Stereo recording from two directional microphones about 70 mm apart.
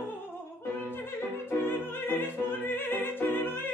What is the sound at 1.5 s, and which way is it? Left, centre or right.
Music, left.